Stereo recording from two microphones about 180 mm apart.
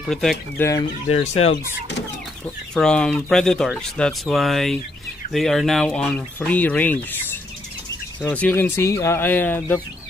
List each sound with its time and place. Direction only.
0.0 s speech: centre (ahead or behind)
1.1 s speech: 35° left (ahead or behind)
1.5 s speech: 75° left (ahead or behind)
2.4 s speech: 5° left (ahead or behind)